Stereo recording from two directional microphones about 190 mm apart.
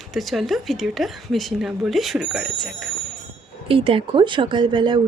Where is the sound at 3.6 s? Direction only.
30° right (ahead or behind).